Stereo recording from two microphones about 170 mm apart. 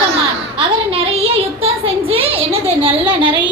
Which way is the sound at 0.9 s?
35° right (ahead or behind).